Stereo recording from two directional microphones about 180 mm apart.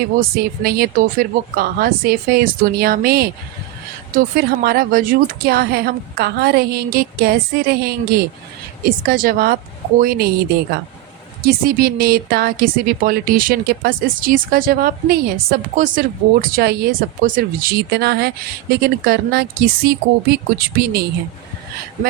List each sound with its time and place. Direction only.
0.2 s a woman's voice: 60° right (ahead or behind)
11.4 s a woman's voice: 55° right (ahead or behind)